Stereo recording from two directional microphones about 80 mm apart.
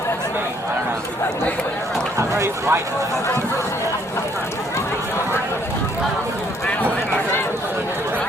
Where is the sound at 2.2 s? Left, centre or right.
Right.